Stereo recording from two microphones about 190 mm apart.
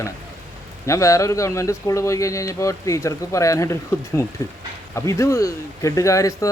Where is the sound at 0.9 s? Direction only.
15° left (ahead or behind).